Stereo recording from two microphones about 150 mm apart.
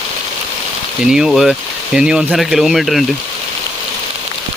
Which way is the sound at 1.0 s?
5° right (ahead or behind).